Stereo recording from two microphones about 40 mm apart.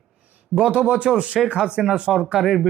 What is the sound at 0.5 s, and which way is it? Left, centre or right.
Speech, right.